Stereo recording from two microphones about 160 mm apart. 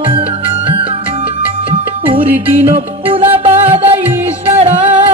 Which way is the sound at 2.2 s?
10° right (ahead or behind).